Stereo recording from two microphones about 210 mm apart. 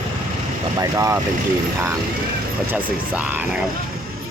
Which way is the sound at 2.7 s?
10° right (ahead or behind).